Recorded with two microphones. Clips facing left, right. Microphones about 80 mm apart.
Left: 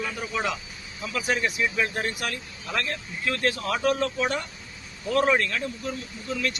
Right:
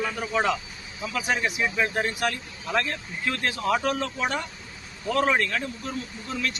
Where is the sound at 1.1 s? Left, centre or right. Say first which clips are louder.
Even; centre.